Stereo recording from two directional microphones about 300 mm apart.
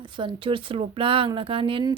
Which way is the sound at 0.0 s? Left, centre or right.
Centre.